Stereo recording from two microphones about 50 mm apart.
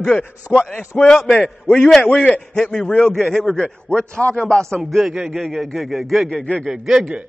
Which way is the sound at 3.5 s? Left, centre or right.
Centre.